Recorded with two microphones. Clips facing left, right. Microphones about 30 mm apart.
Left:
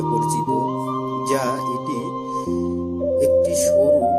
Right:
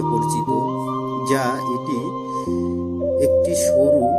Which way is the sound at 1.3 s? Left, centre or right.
Centre.